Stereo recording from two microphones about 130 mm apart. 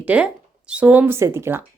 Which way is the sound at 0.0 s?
10° right (ahead or behind).